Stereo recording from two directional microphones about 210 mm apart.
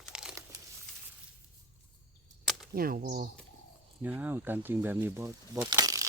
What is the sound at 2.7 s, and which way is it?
Speech, 45° right (ahead or behind).